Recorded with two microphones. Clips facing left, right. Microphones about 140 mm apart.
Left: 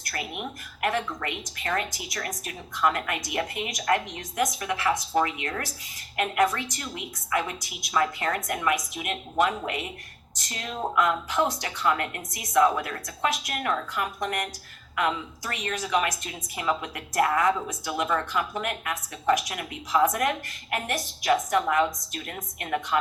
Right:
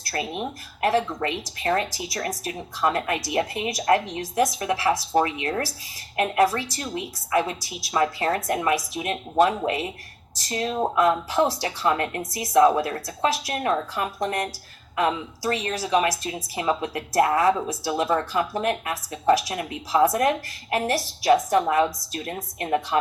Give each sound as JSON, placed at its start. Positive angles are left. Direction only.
{"t": 0.1, "sound": "a woman's voice", "side_deg": -30}